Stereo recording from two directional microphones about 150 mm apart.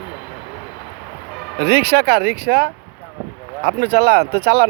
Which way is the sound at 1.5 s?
90° right.